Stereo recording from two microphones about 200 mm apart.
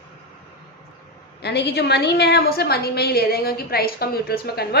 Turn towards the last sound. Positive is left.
turn(degrees=50)  # may be behind; listen again after turning